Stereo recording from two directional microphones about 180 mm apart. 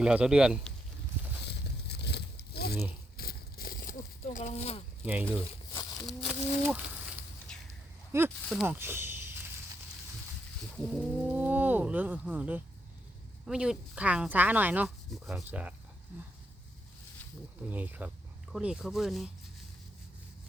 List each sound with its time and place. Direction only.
0.0 s speech: 5° right (ahead or behind)
1.5 s a sound: 65° left (ahead or behind); by 4.8 s 35° left (ahead or behind)
6.1 s a sound: centre (ahead or behind)
8.1 s speech: 15° right (ahead or behind)
10.8 s speech: 5° right (ahead or behind)
17.7 s speech: 10° right (ahead or behind)